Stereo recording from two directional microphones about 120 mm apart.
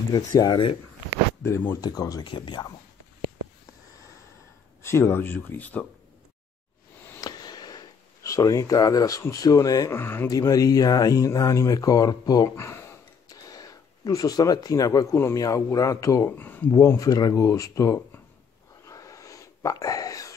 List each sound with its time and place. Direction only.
0.1 s speech: 35° left (ahead or behind)
1.4 s speech: 20° left (ahead or behind); by 2.7 s 40° left (ahead or behind)
4.8 s speech: 20° left (ahead or behind)
7.2 s a sound: 35° left (ahead or behind)
9.9 s speech: 20° left (ahead or behind)
10.3 s speech: 30° left (ahead or behind)
16.3 s speech: 15° left (ahead or behind)
18.9 s a sound: 25° left (ahead or behind)